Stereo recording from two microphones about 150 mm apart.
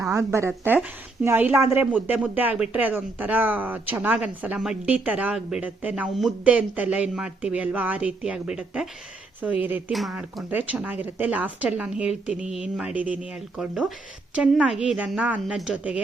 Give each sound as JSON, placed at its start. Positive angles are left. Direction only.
{"t": 0.1, "sound": "speech", "side_deg": -20}
{"t": 9.9, "sound": "speech", "side_deg": 0}